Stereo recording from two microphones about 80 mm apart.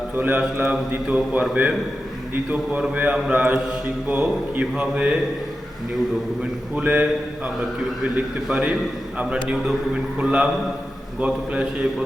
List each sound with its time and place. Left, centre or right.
0.2 s a man's voice: right
0.6 s mantra: centre
2.3 s a man's voice: centre
2.9 s mantra: centre
6.7 s mantra: centre
8.4 s mantra: centre